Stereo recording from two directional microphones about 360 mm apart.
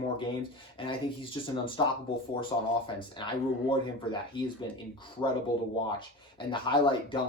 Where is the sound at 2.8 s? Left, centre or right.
Centre.